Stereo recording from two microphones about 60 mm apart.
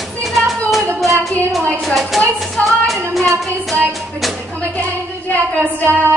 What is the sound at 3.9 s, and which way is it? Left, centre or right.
Music, centre.